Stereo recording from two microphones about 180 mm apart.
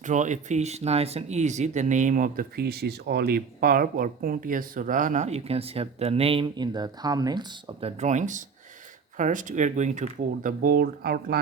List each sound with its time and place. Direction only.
0.0 s speech: 45° right (ahead or behind); by 11.3 s 60° right (ahead or behind)